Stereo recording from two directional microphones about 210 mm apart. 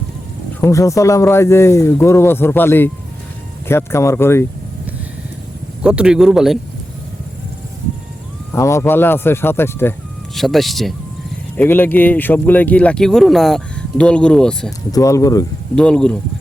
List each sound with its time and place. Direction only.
0.6 s speech: 15° left (ahead or behind)
5.8 s speech: 5° right (ahead or behind)
8.5 s speech: 15° left (ahead or behind)
10.3 s speech: centre (ahead or behind)
14.9 s speech: 15° left (ahead or behind)
15.7 s speech: 5° left (ahead or behind)